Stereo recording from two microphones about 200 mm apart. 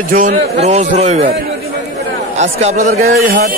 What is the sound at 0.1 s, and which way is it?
Speech, 45° right (ahead or behind).